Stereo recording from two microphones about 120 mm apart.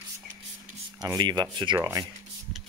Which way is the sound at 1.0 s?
35° right (ahead or behind).